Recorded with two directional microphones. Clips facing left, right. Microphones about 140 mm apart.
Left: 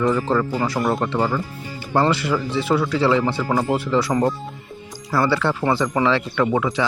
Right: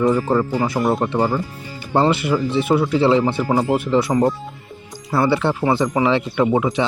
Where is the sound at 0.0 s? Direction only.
20° right (ahead or behind).